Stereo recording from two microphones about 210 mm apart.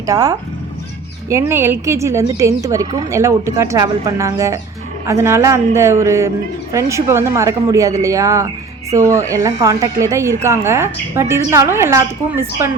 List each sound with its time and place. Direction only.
0.0 s speech: 15° right (ahead or behind)